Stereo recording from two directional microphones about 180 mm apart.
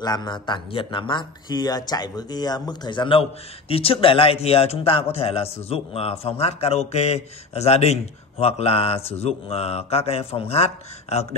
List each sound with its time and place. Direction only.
0.0 s speech: 25° left (ahead or behind)